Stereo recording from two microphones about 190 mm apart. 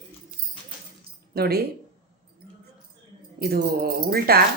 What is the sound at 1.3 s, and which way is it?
Speech, 55° right (ahead or behind).